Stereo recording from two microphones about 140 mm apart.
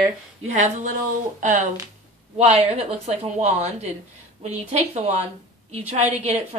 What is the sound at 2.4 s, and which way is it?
A woman's voice, 50° right (ahead or behind).